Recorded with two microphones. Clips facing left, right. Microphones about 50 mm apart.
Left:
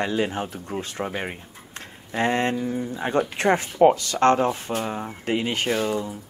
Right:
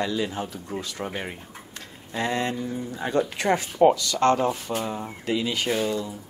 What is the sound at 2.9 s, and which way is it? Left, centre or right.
Speech, left.